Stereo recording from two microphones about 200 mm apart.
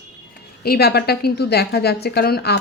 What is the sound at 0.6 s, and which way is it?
A woman's voice, 50° left (ahead or behind).